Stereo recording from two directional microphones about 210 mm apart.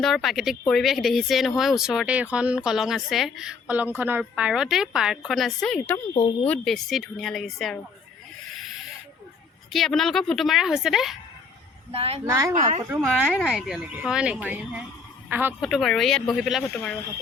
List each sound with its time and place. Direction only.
0.0 s speech: centre (ahead or behind)
9.7 s speech: centre (ahead or behind)
11.9 s a woman's voice: 30° right (ahead or behind)
12.2 s speech: 15° right (ahead or behind)
12.9 s speech: 5° right (ahead or behind)